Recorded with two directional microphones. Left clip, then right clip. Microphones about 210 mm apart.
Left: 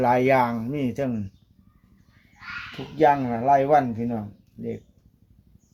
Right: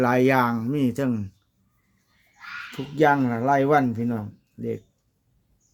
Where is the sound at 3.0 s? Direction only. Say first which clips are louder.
Even; 45° right (ahead or behind).